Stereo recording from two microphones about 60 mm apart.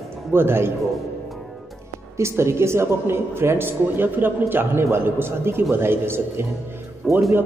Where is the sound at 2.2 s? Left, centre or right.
Right.